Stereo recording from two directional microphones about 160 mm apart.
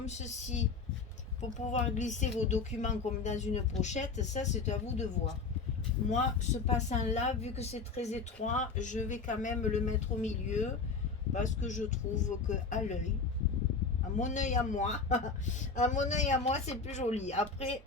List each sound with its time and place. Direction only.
0.0 s speech: 45° left (ahead or behind)
14.2 s speech: 50° left (ahead or behind)